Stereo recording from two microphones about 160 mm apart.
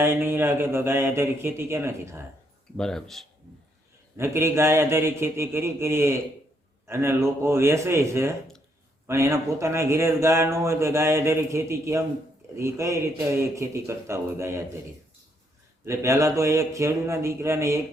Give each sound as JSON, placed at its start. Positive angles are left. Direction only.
{"t": 0.0, "sound": "speech", "side_deg": -15}
{"t": 2.7, "sound": "speech", "side_deg": 5}
{"t": 4.2, "sound": "speech", "side_deg": -15}
{"t": 15.9, "sound": "speech", "side_deg": -20}